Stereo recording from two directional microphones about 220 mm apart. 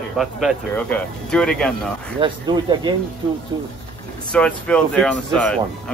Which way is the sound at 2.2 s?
20° right (ahead or behind).